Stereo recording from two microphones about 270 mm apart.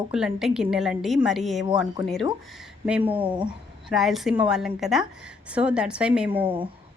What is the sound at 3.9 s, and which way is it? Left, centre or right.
A woman's voice, centre.